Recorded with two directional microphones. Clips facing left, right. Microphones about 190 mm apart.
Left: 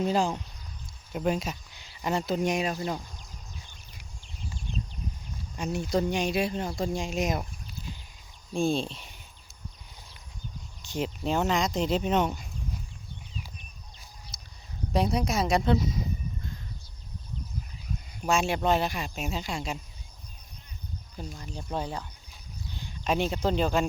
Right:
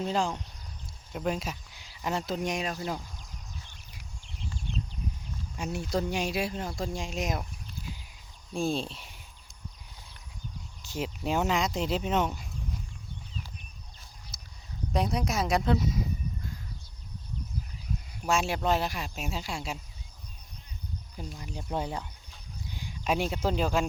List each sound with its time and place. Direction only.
0.0 s speech: 10° left (ahead or behind)
5.5 s speech: 5° right (ahead or behind)
8.5 s speech: 5° right (ahead or behind)
10.8 s speech: 5° right (ahead or behind)
14.9 s speech: centre (ahead or behind)
18.3 s speech: 5° right (ahead or behind)
21.3 s speech: 15° right (ahead or behind)